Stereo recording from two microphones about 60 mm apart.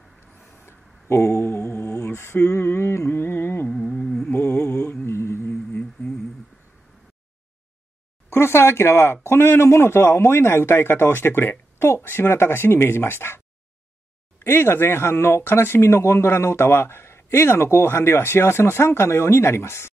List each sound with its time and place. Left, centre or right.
0.5 s humming: left
2.0 s a sound: left
3.9 s humming: centre
4.4 s mantra: left
8.3 s speech: left
14.4 s speech: left